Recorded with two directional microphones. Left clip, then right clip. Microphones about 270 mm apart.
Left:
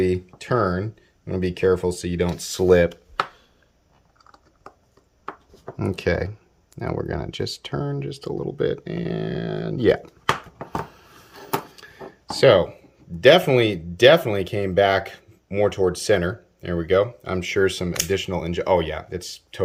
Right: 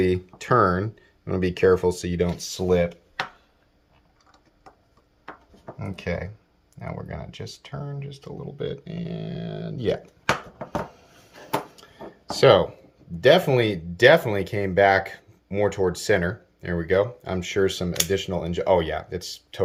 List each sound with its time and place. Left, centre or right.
0.0 s speech: centre
2.5 s speech: centre
5.8 s speech: left
11.8 s a sound: centre
13.2 s speech: centre